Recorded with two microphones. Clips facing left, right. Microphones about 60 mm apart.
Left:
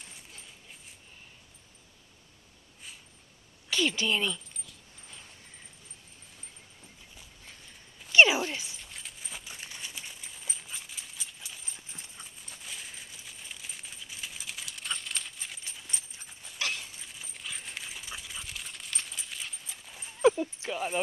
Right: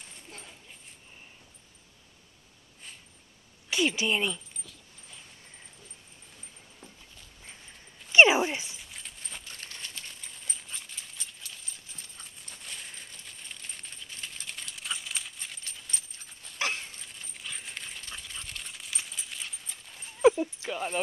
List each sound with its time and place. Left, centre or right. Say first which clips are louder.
3.7 s a woman's voice: right 1 dB; centre
8.1 s dog: right 2 dB; right
8.7 s coin: even; centre
12.2 s coin: even; centre
16.5 s dog: right 3 dB; right
17.0 s dog: even; centre
20.2 s horse: right 2 dB; centre
20.7 s keys jangling: left 1 dB; centre